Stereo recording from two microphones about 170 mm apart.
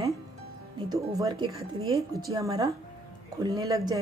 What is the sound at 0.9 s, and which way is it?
Speech, 20° right (ahead or behind).